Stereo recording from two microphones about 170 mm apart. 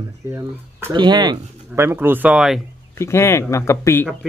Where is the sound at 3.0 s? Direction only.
15° left (ahead or behind).